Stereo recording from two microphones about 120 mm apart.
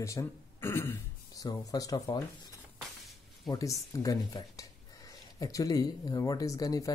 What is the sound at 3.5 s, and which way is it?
Speech, 25° left (ahead or behind).